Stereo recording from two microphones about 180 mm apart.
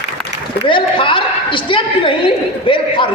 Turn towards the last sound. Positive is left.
turn(degrees=30)  # may be behind; listen again after turning